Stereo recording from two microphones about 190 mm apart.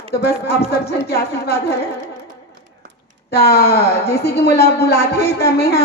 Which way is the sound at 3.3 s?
55° left (ahead or behind).